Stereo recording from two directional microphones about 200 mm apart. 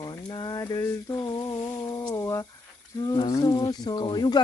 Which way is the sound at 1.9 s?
20° left (ahead or behind).